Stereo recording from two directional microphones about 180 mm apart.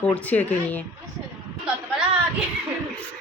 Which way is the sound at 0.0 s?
10° left (ahead or behind).